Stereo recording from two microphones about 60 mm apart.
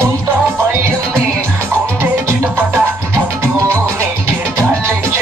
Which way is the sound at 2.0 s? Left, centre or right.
Right.